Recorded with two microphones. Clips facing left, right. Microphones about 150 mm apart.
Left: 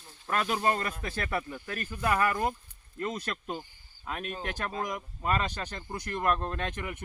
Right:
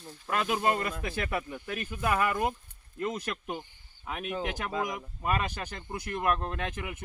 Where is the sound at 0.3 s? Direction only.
10° right (ahead or behind).